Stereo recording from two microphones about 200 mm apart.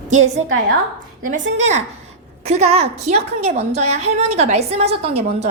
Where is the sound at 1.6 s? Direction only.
35° right (ahead or behind).